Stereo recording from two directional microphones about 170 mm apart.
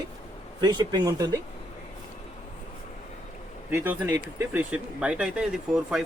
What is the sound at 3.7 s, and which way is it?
Speech, 10° right (ahead or behind).